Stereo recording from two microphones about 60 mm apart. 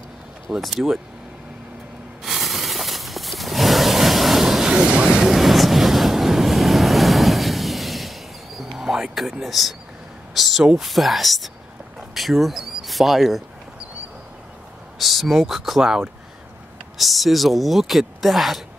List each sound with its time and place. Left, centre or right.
0.6 s speech: centre
2.2 s a sound: centre
9.4 s speech: centre
10.3 s a sound: centre
10.6 s speech: centre
15.0 s speech: centre